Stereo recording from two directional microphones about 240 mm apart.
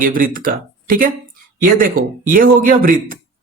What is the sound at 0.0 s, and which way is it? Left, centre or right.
Speech, right.